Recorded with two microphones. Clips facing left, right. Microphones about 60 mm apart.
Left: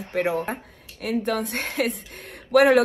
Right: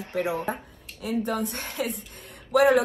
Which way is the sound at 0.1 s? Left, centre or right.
Left.